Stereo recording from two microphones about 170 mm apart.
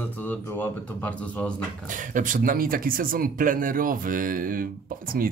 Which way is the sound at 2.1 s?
50° right (ahead or behind).